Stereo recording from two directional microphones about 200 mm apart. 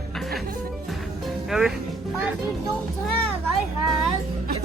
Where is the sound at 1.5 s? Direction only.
Centre (ahead or behind).